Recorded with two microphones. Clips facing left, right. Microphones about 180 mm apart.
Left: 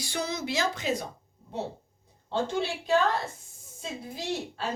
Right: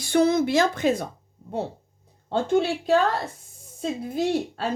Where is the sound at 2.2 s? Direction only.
50° right (ahead or behind).